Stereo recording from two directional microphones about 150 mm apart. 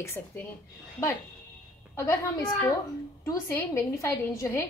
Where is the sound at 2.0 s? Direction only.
20° left (ahead or behind).